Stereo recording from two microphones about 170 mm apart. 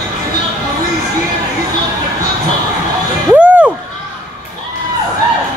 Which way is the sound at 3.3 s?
5° right (ahead or behind).